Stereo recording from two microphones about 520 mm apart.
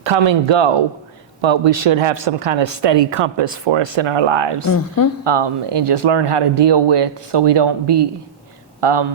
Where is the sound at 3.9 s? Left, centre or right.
Right.